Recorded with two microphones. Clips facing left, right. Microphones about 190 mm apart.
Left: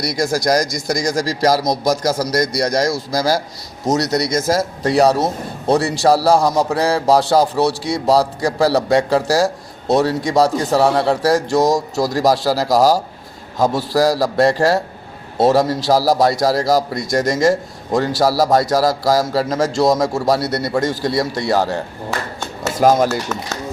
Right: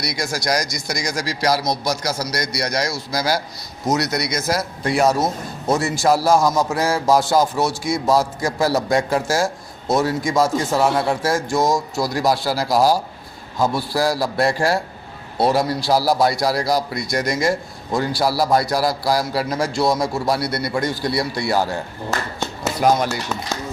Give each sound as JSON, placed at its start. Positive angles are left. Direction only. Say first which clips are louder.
{"t": 0.0, "sound": "a man's voice", "louder": "left 6 dB", "side_deg": 50}